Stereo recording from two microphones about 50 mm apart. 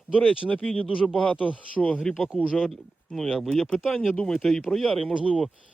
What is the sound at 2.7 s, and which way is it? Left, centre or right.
Speech, centre.